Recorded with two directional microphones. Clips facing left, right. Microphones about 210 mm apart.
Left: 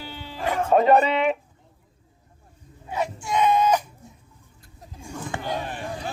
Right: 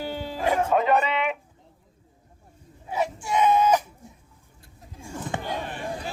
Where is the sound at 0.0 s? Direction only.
45° right (ahead or behind).